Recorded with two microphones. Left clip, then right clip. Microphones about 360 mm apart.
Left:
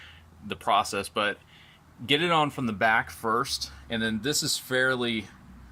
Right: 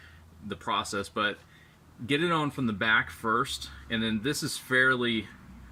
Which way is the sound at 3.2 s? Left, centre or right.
Left.